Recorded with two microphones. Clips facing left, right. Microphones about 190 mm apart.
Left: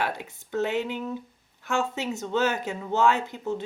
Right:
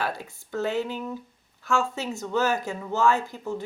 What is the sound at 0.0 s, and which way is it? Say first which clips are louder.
Speech: left 1 dB; 20° left (ahead or behind).